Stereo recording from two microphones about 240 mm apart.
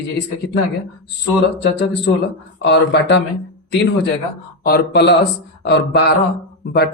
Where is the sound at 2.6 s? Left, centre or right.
Left.